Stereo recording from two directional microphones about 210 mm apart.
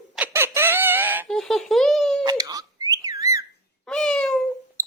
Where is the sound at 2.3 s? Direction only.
15° right (ahead or behind).